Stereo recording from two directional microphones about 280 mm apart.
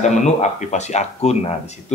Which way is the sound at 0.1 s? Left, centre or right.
Left.